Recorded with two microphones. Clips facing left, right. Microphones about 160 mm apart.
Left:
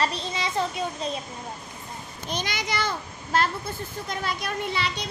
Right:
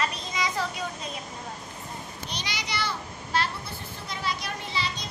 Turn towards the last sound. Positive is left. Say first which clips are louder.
# left 4 dB
turn(degrees=60)  # may be behind; listen again after turning